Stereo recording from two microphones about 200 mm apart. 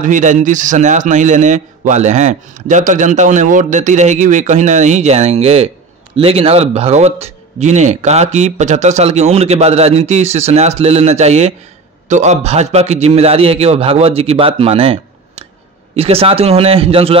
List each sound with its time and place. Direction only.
0.0 s a man's voice: 40° right (ahead or behind)